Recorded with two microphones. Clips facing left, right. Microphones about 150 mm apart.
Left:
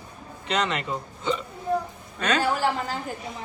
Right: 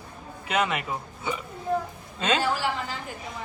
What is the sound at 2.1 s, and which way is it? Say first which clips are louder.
Speech: left 1 dB; 25° right (ahead or behind).